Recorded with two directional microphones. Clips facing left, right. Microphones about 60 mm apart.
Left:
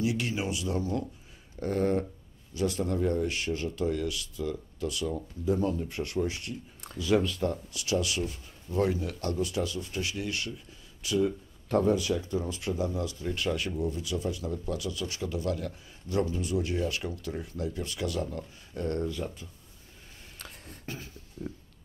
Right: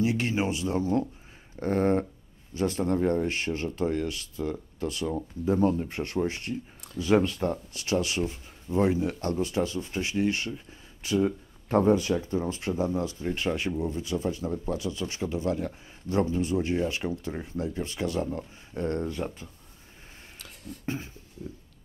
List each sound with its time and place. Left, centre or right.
0.0 s speech: right
20.8 s speech: right
21.4 s a sound: left